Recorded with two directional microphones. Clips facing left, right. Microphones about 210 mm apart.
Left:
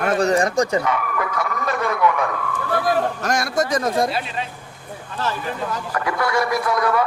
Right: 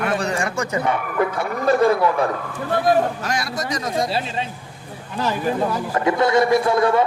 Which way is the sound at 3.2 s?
50° left (ahead or behind).